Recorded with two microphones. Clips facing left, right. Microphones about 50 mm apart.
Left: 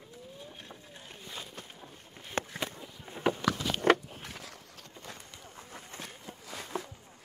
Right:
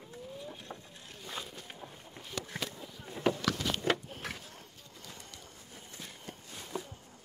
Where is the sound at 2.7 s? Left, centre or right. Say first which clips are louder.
Even; centre.